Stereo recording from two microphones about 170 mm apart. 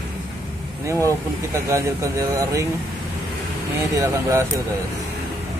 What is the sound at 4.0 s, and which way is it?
Speech, 20° right (ahead or behind).